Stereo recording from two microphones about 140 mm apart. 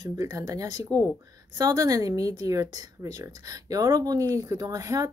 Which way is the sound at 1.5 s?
25° right (ahead or behind).